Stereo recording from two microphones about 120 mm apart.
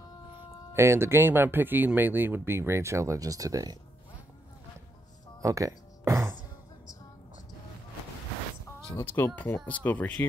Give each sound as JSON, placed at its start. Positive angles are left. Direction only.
{"t": 0.7, "sound": "speech", "side_deg": -20}
{"t": 5.4, "sound": "music", "side_deg": -30}
{"t": 9.0, "sound": "speech", "side_deg": 15}